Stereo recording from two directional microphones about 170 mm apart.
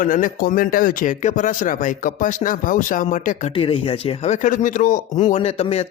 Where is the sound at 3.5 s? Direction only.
35° left (ahead or behind).